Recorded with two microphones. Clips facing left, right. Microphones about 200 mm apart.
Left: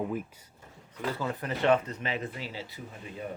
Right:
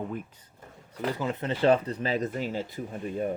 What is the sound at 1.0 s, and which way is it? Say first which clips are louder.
Speech: right 3 dB; 20° right (ahead or behind).